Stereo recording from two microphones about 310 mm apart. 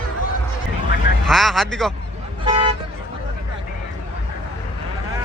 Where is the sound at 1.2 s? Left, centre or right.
Centre.